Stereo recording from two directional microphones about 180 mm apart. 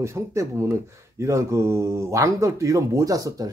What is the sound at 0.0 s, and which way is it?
Speech, 15° right (ahead or behind).